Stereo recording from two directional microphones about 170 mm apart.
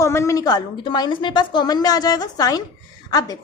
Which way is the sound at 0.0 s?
15° left (ahead or behind).